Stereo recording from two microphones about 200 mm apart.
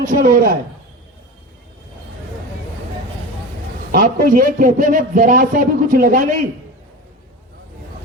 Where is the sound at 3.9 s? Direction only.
45° right (ahead or behind).